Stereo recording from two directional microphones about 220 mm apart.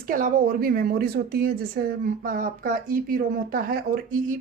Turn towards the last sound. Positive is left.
turn(degrees=-40)  # may be behind; listen again after turning